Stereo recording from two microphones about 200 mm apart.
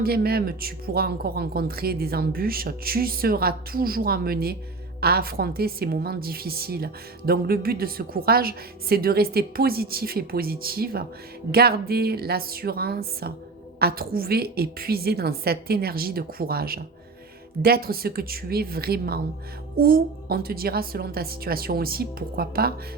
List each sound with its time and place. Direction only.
0.0 s a woman's voice: 50° right (ahead or behind)